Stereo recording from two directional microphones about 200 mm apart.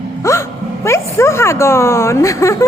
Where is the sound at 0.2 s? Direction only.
15° left (ahead or behind).